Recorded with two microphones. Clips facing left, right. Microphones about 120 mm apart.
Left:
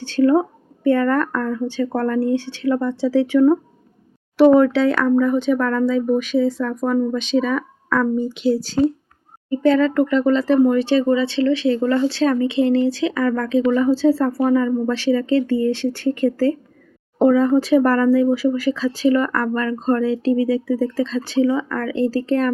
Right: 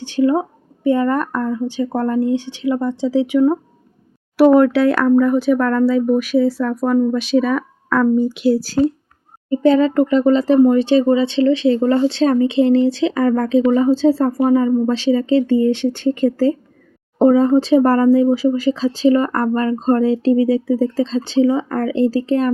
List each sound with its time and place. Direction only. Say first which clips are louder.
0.0 s speech: left 1 dB; 15° right (ahead or behind)
9.5 s speech: right 2 dB; 20° right (ahead or behind)